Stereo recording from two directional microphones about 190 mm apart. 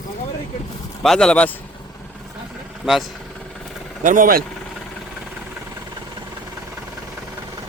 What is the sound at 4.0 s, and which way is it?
Speech, 45° right (ahead or behind).